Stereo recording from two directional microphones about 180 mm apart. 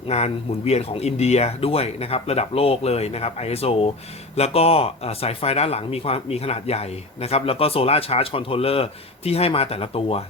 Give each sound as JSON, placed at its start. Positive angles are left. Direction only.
{"t": 0.1, "sound": "speech", "side_deg": 35}